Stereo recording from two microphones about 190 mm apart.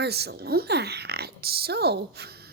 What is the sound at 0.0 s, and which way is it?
Speech, 60° right (ahead or behind).